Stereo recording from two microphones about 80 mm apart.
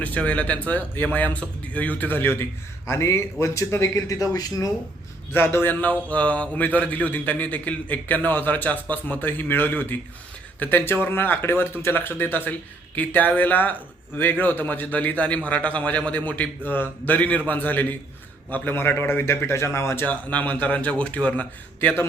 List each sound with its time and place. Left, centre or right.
0.0 s speech: centre; by 4.7 s left
5.3 s speech: left
20.1 s speech: centre